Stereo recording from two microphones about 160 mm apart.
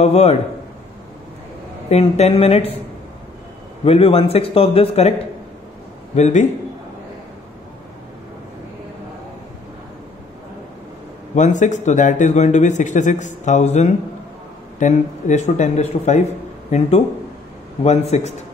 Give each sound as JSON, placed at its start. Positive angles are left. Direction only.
{"t": 0.0, "sound": "a man's voice", "side_deg": 40}
{"t": 1.9, "sound": "a man's voice", "side_deg": 40}
{"t": 3.8, "sound": "a man's voice", "side_deg": 35}
{"t": 6.1, "sound": "a man's voice", "side_deg": 45}
{"t": 11.3, "sound": "a man's voice", "side_deg": 50}